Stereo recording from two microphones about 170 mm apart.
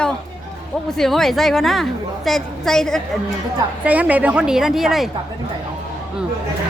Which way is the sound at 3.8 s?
10° right (ahead or behind).